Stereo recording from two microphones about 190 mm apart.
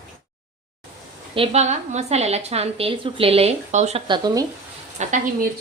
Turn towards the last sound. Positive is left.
turn(degrees=-45)  # may be behind; listen again after turning